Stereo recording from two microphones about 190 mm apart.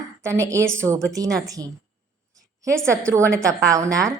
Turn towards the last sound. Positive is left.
turn(degrees=-15)  # may be behind; listen again after turning